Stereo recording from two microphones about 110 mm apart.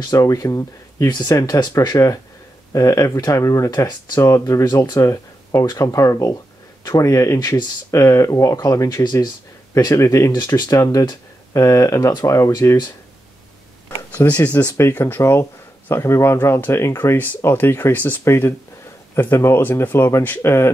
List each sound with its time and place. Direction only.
0.0 s speech: 30° left (ahead or behind)
10.3 s speech: 40° left (ahead or behind)
13.8 s speech: 15° left (ahead or behind)